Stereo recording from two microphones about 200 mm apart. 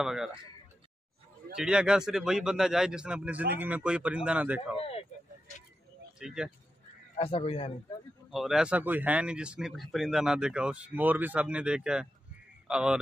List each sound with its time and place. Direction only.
0.0 s speech: centre (ahead or behind)
1.5 s speech: 5° right (ahead or behind)
4.7 s speech: 30° left (ahead or behind)
6.1 s speech: 5° right (ahead or behind)
7.2 s speech: 30° left (ahead or behind)
8.3 s speech: centre (ahead or behind)